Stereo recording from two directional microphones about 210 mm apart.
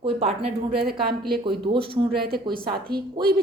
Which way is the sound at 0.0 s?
30° right (ahead or behind).